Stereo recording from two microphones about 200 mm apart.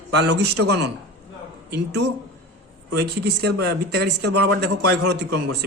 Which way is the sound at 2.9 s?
55° right (ahead or behind).